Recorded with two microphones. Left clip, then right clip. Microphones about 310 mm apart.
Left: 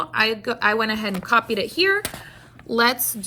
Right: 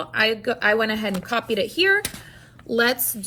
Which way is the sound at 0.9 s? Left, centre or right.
Centre.